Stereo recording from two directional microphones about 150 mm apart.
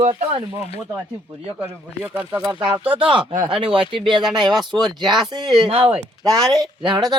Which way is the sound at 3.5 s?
35° right (ahead or behind).